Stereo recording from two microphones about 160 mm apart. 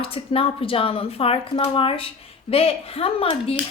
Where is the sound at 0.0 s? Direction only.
35° left (ahead or behind).